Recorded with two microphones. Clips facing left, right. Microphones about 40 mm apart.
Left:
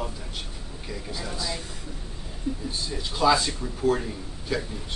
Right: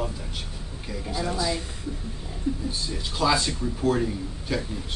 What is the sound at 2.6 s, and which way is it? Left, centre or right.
Speech, centre.